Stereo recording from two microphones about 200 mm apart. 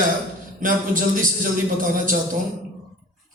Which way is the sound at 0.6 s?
40° right (ahead or behind).